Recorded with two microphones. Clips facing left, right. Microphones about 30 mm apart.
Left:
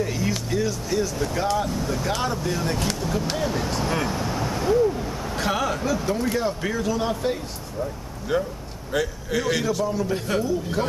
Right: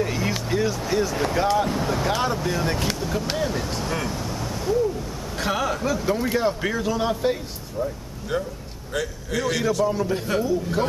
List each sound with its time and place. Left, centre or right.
0.0 s music: centre
1.3 s speech: centre
1.7 s speech: right
2.0 s speech: centre
5.3 s speech: centre